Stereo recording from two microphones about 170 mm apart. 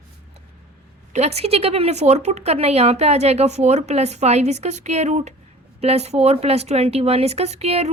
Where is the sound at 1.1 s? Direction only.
40° right (ahead or behind).